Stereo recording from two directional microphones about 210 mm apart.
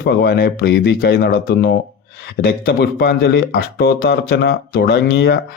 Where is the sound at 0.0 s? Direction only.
50° left (ahead or behind).